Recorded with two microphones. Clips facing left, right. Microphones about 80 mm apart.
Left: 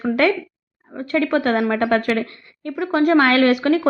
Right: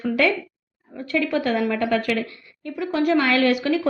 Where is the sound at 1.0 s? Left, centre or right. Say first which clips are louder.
Left 4 dB; left.